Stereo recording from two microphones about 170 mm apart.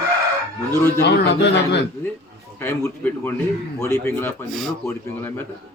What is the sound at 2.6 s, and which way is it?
A man's voice, 10° left (ahead or behind).